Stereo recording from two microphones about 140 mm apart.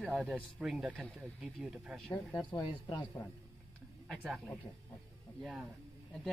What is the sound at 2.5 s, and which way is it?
Speech, 30° left (ahead or behind).